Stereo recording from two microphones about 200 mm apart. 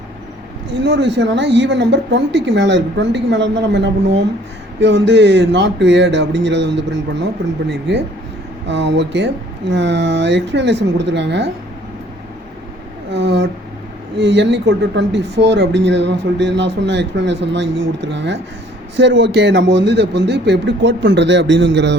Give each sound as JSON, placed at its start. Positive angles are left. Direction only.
{"t": 0.7, "sound": "speech", "side_deg": -60}
{"t": 13.1, "sound": "a sound", "side_deg": -60}
{"t": 14.2, "sound": "speech", "side_deg": -60}